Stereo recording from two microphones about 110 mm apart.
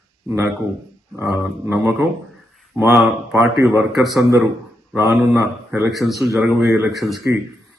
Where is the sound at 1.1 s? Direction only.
25° right (ahead or behind).